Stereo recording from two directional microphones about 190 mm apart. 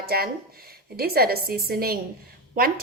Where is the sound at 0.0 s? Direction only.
55° right (ahead or behind).